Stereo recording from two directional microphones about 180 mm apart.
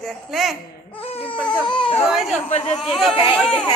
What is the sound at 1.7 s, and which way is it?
Speech, 30° left (ahead or behind).